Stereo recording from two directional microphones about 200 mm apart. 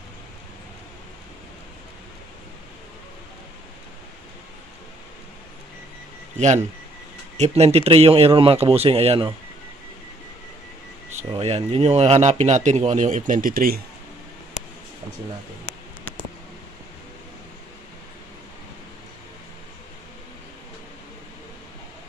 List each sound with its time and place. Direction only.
6.3 s a man's voice: 35° right (ahead or behind)
11.3 s speech: 30° right (ahead or behind); by 13.8 s 45° right (ahead or behind)